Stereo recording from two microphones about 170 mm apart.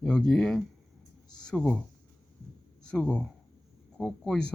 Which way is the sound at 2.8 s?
5° left (ahead or behind).